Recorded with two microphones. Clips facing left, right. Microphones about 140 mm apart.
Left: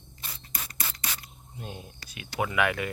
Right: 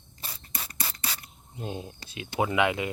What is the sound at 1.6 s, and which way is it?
Speech, 25° right (ahead or behind).